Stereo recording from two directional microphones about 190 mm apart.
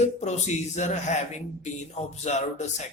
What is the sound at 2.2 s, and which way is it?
Speech, 35° left (ahead or behind).